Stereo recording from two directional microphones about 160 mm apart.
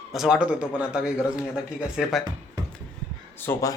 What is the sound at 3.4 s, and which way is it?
Speech, 20° left (ahead or behind).